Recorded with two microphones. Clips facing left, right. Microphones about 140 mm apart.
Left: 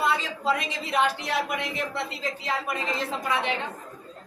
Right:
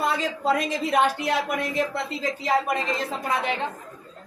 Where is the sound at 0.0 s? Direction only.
45° right (ahead or behind).